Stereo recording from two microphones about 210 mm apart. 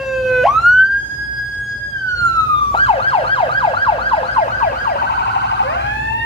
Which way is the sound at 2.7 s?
25° left (ahead or behind).